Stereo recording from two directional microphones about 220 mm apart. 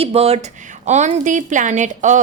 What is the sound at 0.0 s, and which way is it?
A woman's voice, 30° right (ahead or behind).